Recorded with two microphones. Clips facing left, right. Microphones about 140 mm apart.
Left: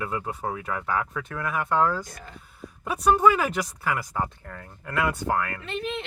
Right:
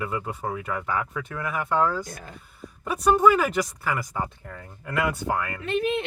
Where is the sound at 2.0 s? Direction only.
50° right (ahead or behind).